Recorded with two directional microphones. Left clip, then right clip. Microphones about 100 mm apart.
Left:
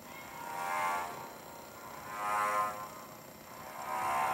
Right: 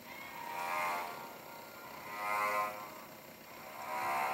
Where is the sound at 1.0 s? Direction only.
5° left (ahead or behind).